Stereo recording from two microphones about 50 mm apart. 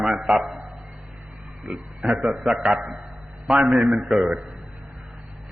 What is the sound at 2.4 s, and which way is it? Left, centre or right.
Speech, centre.